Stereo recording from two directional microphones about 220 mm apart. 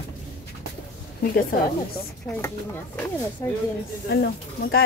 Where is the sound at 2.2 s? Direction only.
10° left (ahead or behind).